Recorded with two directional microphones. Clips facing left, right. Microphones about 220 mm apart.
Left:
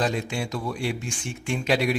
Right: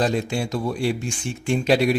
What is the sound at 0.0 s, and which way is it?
Speech, 35° right (ahead or behind).